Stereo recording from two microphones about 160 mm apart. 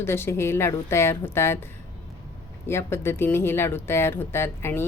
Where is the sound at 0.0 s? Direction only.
15° left (ahead or behind).